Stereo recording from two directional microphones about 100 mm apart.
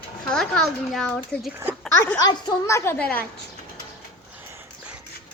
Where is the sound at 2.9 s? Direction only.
15° left (ahead or behind).